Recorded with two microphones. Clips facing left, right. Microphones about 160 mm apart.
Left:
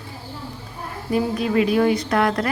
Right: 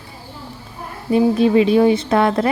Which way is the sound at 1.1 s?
25° right (ahead or behind).